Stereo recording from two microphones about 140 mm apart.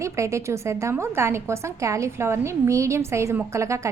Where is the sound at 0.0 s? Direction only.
20° right (ahead or behind).